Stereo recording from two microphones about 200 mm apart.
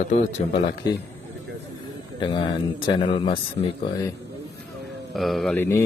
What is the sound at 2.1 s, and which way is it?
Speech, 20° left (ahead or behind).